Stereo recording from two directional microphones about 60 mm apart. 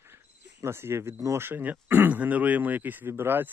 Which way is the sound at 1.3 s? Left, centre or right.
Right.